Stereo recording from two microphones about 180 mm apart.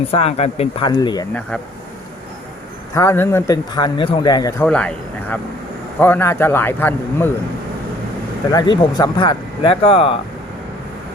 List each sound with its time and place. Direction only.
0.1 s speech: 35° left (ahead or behind)
0.9 s a man's voice: 25° left (ahead or behind)
2.9 s a man's voice: 15° left (ahead or behind)
4.6 s speech: 5° left (ahead or behind)
8.4 s a man's voice: 25° left (ahead or behind)